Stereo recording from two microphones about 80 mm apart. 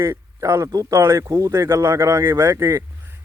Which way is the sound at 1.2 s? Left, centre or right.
Right.